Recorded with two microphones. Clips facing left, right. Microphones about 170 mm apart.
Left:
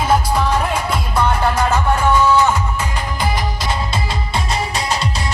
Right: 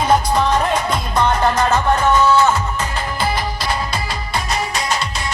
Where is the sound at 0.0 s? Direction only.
5° left (ahead or behind).